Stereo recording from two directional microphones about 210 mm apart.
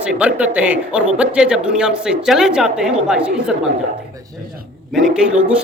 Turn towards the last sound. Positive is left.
turn(degrees=-5)  # may be behind; listen again after turning